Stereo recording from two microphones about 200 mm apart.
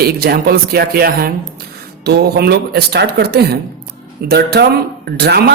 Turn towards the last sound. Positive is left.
turn(degrees=-55)  # may be behind; listen again after turning